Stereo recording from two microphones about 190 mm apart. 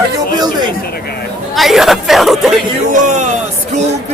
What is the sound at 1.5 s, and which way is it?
Speech, centre (ahead or behind).